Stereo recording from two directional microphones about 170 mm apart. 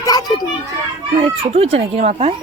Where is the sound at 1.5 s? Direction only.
35° right (ahead or behind).